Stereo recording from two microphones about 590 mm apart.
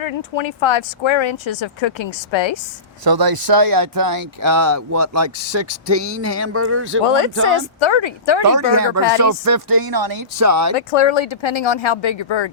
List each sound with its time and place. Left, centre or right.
0.0 s speech: left
3.0 s speech: right
7.0 s speech: left
8.4 s speech: right
10.8 s speech: left